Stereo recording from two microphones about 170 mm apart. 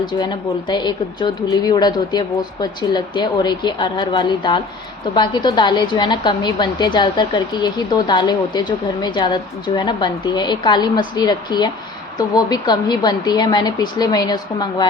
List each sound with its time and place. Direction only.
0.2 s a woman's voice: 25° left (ahead or behind)